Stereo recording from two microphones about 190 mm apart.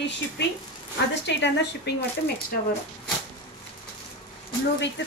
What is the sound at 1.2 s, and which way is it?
Speech, 65° left (ahead or behind).